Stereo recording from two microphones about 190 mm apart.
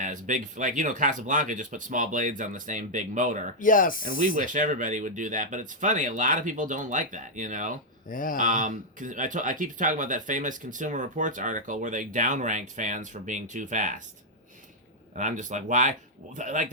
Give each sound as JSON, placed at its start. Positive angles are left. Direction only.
{"t": 0.0, "sound": "speech", "side_deg": -45}
{"t": 3.6, "sound": "speech", "side_deg": 45}
{"t": 4.2, "sound": "speech", "side_deg": -45}
{"t": 8.1, "sound": "speech", "side_deg": 45}
{"t": 8.4, "sound": "speech", "side_deg": -40}
{"t": 15.1, "sound": "speech", "side_deg": -40}